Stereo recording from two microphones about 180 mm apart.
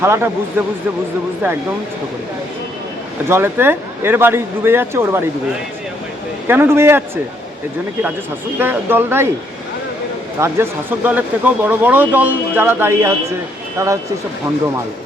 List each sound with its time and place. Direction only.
0.0 s speech: 15° right (ahead or behind)
3.2 s speech: 15° right (ahead or behind)
6.5 s speech: 15° right (ahead or behind)
8.5 s speech: 10° right (ahead or behind)
10.4 s speech: 10° right (ahead or behind)